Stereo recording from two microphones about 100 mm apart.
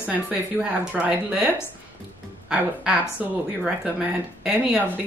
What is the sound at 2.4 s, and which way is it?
Speech, 10° right (ahead or behind).